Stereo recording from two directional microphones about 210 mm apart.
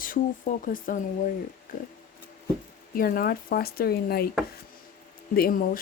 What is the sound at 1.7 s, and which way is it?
Pig, 40° left (ahead or behind).